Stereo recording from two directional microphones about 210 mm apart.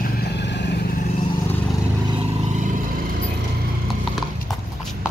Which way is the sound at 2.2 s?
35° right (ahead or behind).